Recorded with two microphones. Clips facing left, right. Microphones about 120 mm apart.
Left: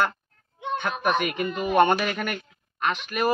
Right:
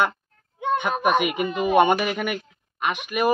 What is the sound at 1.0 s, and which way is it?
Speech, 15° right (ahead or behind).